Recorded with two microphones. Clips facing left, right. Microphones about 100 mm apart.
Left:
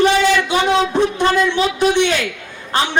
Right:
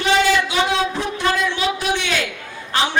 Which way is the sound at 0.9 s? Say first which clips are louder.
Left 6 dB; 20° left (ahead or behind).